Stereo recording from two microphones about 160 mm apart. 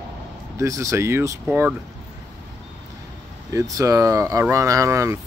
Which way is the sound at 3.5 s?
20° right (ahead or behind).